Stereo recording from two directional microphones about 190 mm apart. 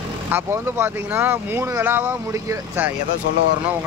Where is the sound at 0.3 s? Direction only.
10° right (ahead or behind).